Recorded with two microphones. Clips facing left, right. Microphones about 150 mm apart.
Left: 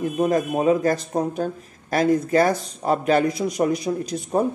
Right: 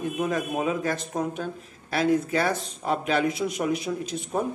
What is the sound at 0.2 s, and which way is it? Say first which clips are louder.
A man's voice: left 7 dB; 40° left (ahead or behind).